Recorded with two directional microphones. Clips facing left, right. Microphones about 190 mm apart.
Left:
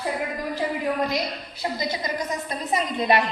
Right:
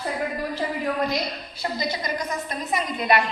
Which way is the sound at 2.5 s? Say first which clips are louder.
Left 3 dB; 25° left (ahead or behind).